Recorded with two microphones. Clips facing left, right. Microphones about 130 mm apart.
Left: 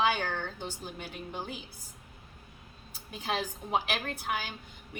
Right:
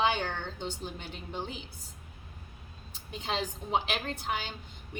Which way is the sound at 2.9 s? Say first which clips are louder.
Left 1 dB; 25° right (ahead or behind).